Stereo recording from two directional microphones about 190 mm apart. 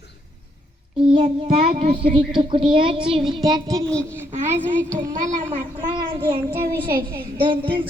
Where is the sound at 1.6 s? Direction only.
35° right (ahead or behind).